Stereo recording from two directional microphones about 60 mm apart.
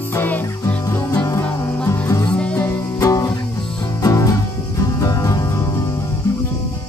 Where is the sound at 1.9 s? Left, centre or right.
Left.